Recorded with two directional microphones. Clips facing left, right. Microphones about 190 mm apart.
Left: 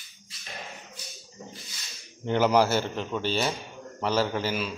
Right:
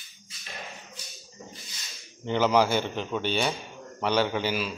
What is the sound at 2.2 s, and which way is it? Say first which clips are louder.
A man's voice: left 1 dB; 10° left (ahead or behind).